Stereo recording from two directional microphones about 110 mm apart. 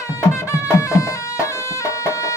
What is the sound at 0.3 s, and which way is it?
Music, 25° left (ahead or behind).